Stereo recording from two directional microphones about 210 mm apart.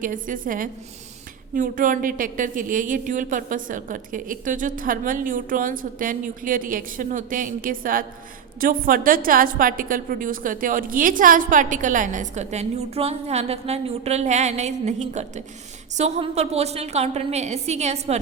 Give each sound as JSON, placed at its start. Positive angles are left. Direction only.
{"t": 0.0, "sound": "a woman's voice", "side_deg": -40}